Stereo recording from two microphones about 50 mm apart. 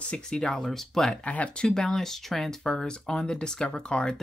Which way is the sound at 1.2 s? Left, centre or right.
Left.